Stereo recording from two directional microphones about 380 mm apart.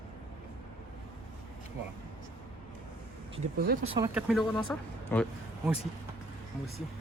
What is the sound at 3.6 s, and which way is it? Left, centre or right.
Speech, right.